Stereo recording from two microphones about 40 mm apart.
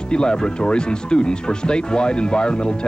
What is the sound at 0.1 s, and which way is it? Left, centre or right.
Speech, left.